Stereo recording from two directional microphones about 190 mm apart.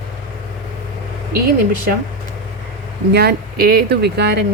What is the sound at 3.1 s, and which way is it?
Speech, 60° right (ahead or behind).